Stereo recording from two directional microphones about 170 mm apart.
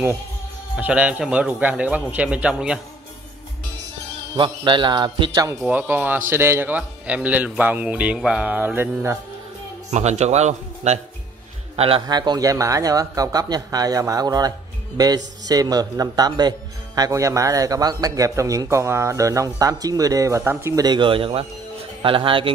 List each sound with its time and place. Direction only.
0.7 s speech: 10° right (ahead or behind)
4.4 s speech: 30° right (ahead or behind)
5.7 s speech: 10° right (ahead or behind)
9.8 s a man's voice: 40° right (ahead or behind)
12.1 s speech: 25° right (ahead or behind)